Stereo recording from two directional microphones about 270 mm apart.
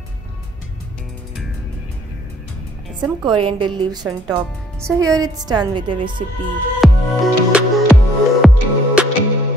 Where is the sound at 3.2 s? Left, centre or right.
Centre.